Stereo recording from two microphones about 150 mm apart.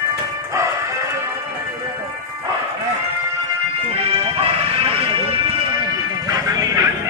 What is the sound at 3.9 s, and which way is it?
Music, 40° right (ahead or behind).